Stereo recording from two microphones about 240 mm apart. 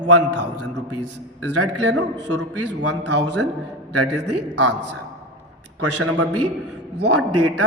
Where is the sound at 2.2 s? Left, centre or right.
Right.